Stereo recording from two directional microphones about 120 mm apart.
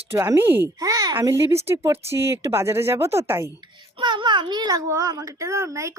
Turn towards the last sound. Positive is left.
turn(degrees=-25)  # may be behind; listen again after turning